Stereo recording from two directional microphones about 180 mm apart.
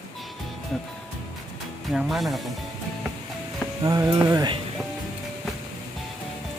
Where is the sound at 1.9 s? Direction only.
Centre (ahead or behind).